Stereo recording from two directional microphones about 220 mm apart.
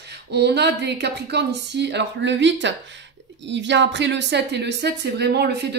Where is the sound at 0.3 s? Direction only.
50° right (ahead or behind).